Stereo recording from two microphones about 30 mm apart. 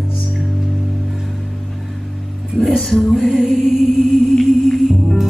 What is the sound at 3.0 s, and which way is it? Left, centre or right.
Female singing, centre.